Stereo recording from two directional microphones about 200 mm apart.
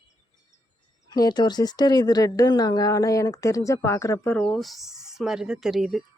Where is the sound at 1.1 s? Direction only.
20° left (ahead or behind).